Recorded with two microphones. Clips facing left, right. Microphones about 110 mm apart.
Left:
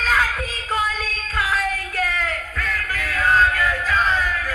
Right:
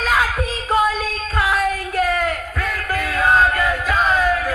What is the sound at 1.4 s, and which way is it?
Music, 15° right (ahead or behind).